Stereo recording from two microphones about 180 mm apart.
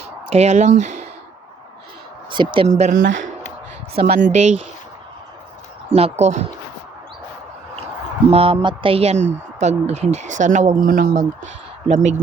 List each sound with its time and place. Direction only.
0.0 s speech: 35° right (ahead or behind)
2.3 s speech: 25° right (ahead or behind)
2.6 s speech: 40° right (ahead or behind)
3.0 s speech: 90° right
4.3 s speech: 40° right (ahead or behind)
5.9 s speech: 40° right (ahead or behind)
8.3 s speech: 30° right (ahead or behind)